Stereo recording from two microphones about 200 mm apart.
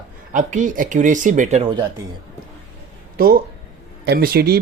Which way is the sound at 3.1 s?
50° right (ahead or behind).